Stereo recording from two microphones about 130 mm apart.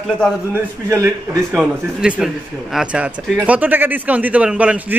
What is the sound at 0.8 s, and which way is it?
Speech, 20° right (ahead or behind).